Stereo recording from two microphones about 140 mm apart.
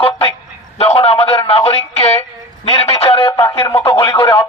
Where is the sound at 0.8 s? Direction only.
45° left (ahead or behind).